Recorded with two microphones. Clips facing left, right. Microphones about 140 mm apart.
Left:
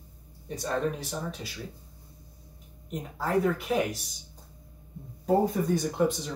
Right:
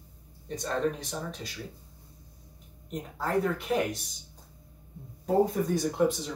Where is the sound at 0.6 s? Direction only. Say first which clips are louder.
Even; 5° left (ahead or behind).